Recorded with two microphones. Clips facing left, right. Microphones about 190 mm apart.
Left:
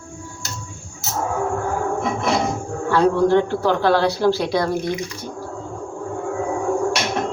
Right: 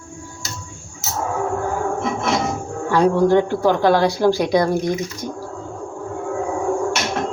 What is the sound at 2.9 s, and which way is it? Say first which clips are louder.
A woman's voice: right 1 dB; 15° right (ahead or behind).